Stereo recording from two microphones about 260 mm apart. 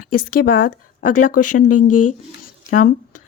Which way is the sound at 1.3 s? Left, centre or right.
Left.